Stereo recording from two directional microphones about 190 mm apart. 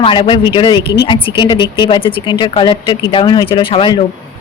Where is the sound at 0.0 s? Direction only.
25° left (ahead or behind).